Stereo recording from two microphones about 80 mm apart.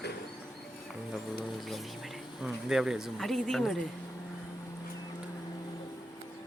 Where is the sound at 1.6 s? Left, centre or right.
Centre.